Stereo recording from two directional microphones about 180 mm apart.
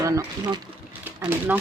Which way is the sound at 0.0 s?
20° right (ahead or behind).